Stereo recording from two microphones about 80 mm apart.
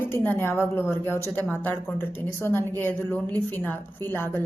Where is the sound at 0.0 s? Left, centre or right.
Left.